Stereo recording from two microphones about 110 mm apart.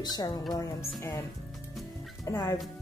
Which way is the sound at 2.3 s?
25° left (ahead or behind).